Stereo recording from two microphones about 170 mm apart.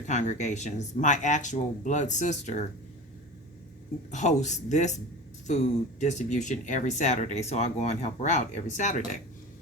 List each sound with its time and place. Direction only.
0.0 s speech: 45° left (ahead or behind)
4.1 s speech: 45° left (ahead or behind)
6.0 s speech: 45° left (ahead or behind)